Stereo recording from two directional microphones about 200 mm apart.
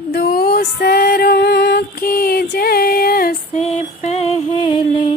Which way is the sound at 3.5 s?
35° left (ahead or behind).